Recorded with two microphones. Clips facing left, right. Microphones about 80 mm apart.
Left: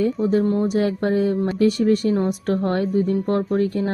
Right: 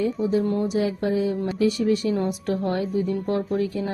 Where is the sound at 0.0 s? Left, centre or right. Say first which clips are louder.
Left 3 dB; left.